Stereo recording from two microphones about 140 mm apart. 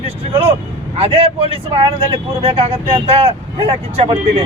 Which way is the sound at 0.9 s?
45° right (ahead or behind).